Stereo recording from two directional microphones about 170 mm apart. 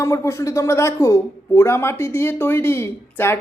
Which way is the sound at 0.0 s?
15° left (ahead or behind).